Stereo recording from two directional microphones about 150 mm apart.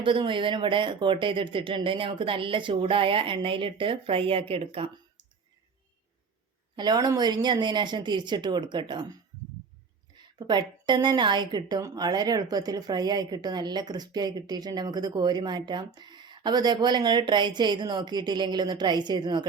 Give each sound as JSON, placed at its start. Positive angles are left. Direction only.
{"t": 0.0, "sound": "speech", "side_deg": -35}
{"t": 6.7, "sound": "a woman's voice", "side_deg": -30}
{"t": 10.3, "sound": "a woman's voice", "side_deg": -30}